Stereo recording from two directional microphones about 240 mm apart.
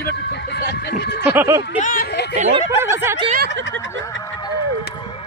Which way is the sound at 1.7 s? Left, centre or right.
Left.